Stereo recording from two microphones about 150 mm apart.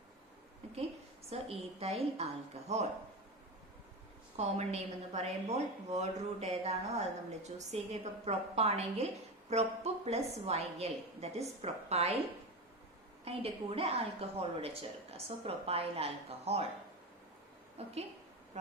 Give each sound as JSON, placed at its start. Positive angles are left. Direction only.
{"t": 1.3, "sound": "a woman's voice", "side_deg": -40}
{"t": 4.4, "sound": "a woman's voice", "side_deg": -45}
{"t": 13.2, "sound": "a woman's voice", "side_deg": -40}
{"t": 17.8, "sound": "a woman's voice", "side_deg": -45}